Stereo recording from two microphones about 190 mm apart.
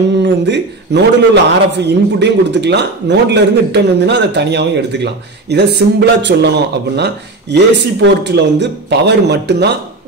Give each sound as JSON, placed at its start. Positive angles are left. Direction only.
{"t": 0.2, "sound": "a man's voice", "side_deg": -65}